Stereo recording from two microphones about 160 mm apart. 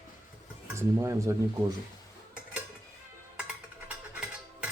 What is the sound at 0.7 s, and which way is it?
Speech, 20° right (ahead or behind).